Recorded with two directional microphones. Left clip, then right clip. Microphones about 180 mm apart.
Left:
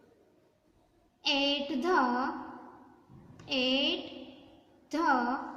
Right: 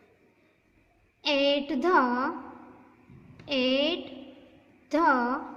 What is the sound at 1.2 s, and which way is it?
A woman's voice, 45° right (ahead or behind).